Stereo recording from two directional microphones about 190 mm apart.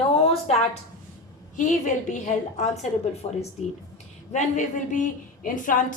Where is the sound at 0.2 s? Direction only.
35° left (ahead or behind).